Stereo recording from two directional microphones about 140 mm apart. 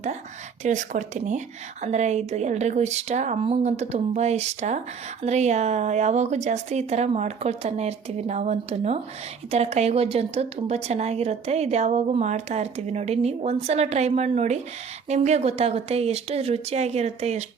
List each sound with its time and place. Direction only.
0.6 s speech: 60° right (ahead or behind)